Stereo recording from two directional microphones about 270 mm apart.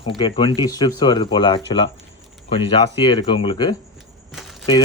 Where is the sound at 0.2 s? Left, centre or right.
Centre.